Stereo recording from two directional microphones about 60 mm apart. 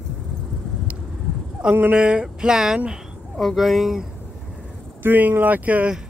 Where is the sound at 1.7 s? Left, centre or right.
Right; by 4.1 s centre.